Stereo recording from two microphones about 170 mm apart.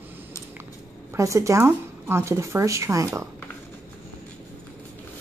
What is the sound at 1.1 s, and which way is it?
Speech, 20° right (ahead or behind).